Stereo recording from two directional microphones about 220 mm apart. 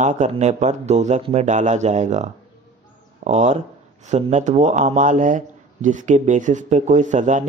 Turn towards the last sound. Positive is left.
turn(degrees=-35)  # may be behind; listen again after turning